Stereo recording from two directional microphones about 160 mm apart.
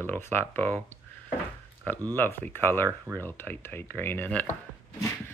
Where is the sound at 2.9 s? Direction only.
15° right (ahead or behind).